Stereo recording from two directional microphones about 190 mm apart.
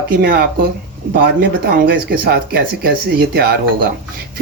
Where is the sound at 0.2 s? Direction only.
55° right (ahead or behind).